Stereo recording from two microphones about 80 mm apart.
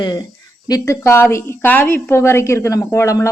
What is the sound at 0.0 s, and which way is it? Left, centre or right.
Speech, left.